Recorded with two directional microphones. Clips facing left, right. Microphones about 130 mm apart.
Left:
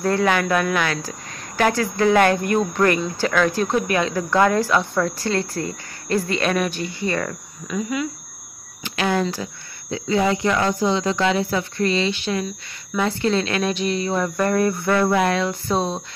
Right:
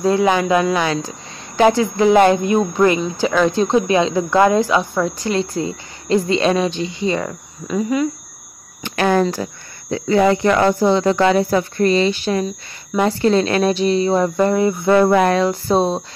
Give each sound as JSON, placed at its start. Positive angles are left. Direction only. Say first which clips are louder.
{"t": 0.0, "sound": "speech", "louder": "right 4 dB", "side_deg": -15}
{"t": 7.6, "sound": "speech", "louder": "right 6 dB", "side_deg": -35}
{"t": 8.8, "sound": "speech", "louder": "right 5 dB", "side_deg": -50}
{"t": 15.0, "sound": "speech", "louder": "right 5 dB", "side_deg": -45}